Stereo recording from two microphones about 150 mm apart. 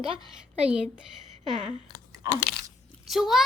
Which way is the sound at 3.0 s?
Centre (ahead or behind).